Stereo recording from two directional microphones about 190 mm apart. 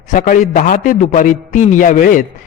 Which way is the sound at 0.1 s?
45° left (ahead or behind).